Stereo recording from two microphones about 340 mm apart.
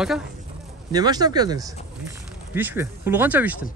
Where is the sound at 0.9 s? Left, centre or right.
Centre.